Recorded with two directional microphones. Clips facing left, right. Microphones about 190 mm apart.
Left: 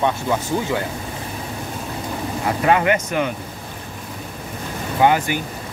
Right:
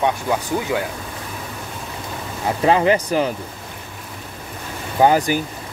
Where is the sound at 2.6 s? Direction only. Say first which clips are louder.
Right 2 dB; 30° right (ahead or behind).